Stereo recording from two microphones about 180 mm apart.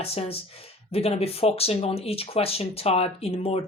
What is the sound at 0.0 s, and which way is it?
Speech, 35° left (ahead or behind).